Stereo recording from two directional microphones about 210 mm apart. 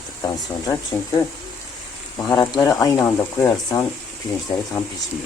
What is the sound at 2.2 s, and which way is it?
Speech, 20° left (ahead or behind).